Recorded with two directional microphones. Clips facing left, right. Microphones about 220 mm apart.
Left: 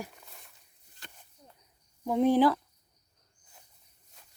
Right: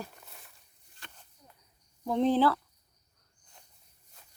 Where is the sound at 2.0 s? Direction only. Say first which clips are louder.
Left 2 dB; 10° left (ahead or behind).